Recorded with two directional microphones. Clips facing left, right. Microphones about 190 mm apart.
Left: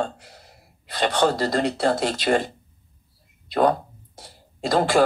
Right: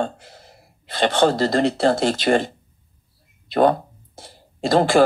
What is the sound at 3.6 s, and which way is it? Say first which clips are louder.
Speech: right 3 dB; 30° right (ahead or behind).